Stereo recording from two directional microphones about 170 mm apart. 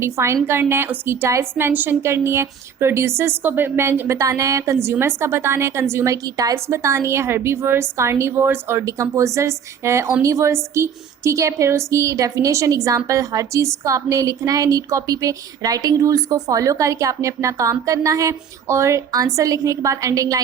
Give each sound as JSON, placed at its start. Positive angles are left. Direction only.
{"t": 0.0, "sound": "a woman's voice", "side_deg": -15}